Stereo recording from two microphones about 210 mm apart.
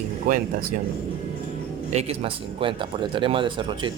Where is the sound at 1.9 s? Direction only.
30° right (ahead or behind).